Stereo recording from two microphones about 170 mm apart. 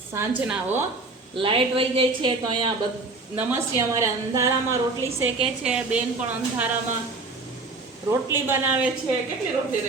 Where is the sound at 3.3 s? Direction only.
15° right (ahead or behind).